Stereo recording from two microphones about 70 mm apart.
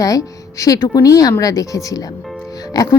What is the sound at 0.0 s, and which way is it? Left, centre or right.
A woman's voice, left.